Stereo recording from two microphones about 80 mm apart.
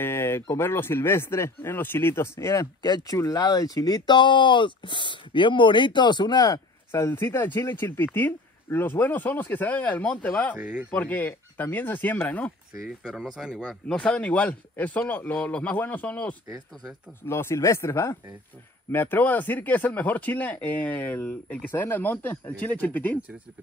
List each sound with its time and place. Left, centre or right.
0.0 s speech: left
2.8 s speech: left
6.9 s speech: left
10.6 s speech: centre
10.9 s speech: left
13.3 s speech: centre
13.8 s speech: centre
17.3 s speech: left